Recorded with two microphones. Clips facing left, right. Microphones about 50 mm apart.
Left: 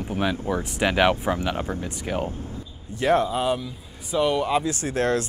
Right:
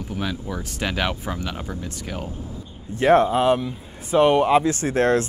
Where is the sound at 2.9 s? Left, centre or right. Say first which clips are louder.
Right 5 dB; right.